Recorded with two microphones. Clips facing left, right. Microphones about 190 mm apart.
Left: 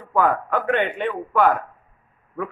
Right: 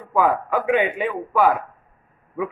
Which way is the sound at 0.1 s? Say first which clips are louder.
Right 1 dB; 5° right (ahead or behind).